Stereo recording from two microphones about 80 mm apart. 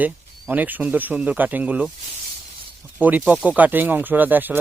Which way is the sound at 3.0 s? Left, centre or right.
Right.